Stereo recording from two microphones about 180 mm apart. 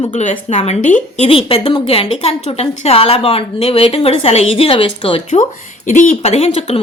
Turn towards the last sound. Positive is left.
turn(degrees=35)  # may be behind; listen again after turning